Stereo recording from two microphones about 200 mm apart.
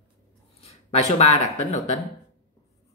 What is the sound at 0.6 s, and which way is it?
Speech, 30° left (ahead or behind).